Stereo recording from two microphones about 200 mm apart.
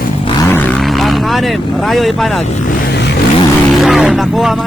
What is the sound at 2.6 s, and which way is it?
Vehicle, 55° left (ahead or behind).